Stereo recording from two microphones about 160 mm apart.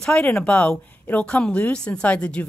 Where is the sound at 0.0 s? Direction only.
5° left (ahead or behind).